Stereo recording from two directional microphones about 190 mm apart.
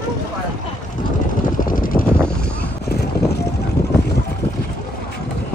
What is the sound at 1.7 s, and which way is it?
Vehicle, 45° left (ahead or behind).